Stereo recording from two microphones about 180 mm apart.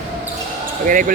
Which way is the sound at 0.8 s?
50° right (ahead or behind).